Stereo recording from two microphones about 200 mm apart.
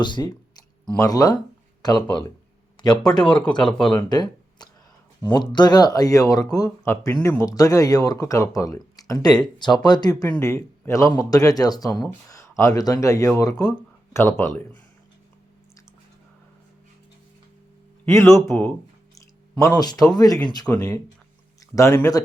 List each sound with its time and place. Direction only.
0.0 s speech: 20° left (ahead or behind)
2.7 s a sound: 20° left (ahead or behind)
3.0 s speech: 5° left (ahead or behind)
4.1 s a sound: 20° left (ahead or behind)
5.2 s speech: 20° left (ahead or behind)
18.0 s speech: 15° left (ahead or behind)